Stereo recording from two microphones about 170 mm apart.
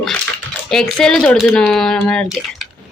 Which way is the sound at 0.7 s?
Centre (ahead or behind).